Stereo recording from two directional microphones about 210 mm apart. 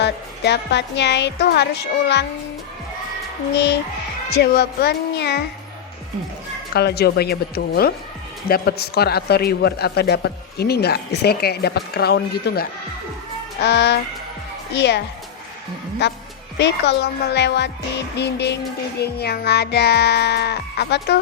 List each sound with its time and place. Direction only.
0.0 s a woman's voice: 55° left (ahead or behind)
3.5 s music: 55° left (ahead or behind)
4.3 s a woman's voice: 50° left (ahead or behind)
6.7 s music: 50° left (ahead or behind)
13.6 s a woman's voice: 55° left (ahead or behind)
16.0 s music: 55° left (ahead or behind)
16.6 s a woman's voice: 55° left (ahead or behind)
18.2 s music: 55° left (ahead or behind)